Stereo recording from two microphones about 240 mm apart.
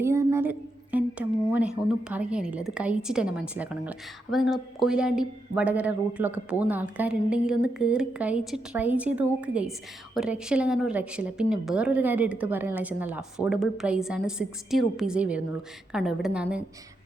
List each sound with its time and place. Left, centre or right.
0.0 s a woman's voice: centre